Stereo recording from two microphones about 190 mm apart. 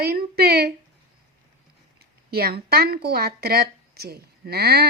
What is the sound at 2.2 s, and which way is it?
Speech, 55° right (ahead or behind).